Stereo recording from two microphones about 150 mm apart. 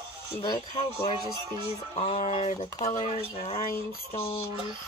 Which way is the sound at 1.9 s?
40° left (ahead or behind).